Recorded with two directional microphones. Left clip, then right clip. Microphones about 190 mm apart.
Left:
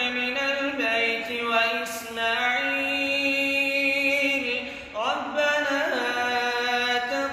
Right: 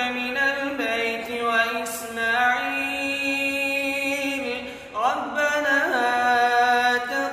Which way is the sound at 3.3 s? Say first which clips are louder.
Even; 10° right (ahead or behind).